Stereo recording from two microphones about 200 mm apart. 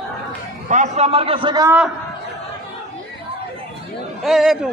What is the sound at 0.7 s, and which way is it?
A man's voice, 35° right (ahead or behind).